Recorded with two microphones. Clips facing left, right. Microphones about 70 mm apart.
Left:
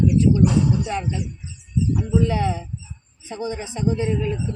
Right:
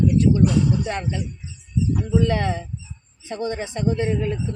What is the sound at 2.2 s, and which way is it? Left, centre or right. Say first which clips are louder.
A woman's voice: even; right.